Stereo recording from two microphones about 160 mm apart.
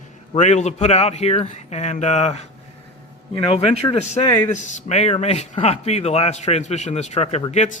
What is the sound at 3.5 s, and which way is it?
Speech, 40° left (ahead or behind).